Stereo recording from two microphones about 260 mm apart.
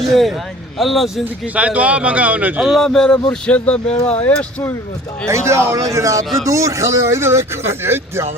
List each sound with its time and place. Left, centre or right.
0.1 s speech: centre
3.8 s speech: left
4.3 s speech: centre
5.3 s speech: centre